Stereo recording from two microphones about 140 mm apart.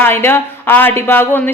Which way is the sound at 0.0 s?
15° left (ahead or behind).